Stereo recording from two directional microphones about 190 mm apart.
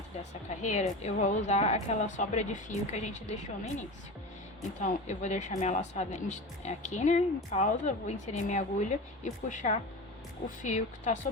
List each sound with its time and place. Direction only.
0.2 s speech: 40° left (ahead or behind)